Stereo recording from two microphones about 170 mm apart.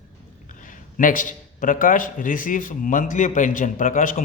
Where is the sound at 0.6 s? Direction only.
50° left (ahead or behind).